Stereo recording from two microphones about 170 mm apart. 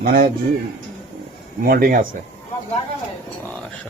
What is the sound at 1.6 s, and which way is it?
Speech, 55° right (ahead or behind).